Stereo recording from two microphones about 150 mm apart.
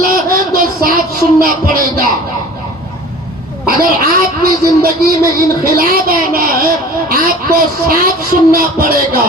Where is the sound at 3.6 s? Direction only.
85° right.